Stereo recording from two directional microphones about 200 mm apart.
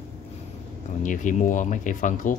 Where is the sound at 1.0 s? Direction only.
40° left (ahead or behind).